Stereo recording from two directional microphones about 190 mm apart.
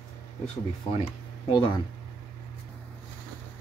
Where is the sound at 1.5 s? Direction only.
25° left (ahead or behind).